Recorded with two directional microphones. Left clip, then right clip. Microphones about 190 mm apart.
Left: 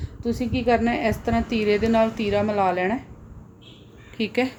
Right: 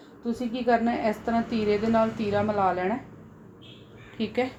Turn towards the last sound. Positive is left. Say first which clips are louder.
# left 4 dB
turn(degrees=40)  # may be behind; listen again after turning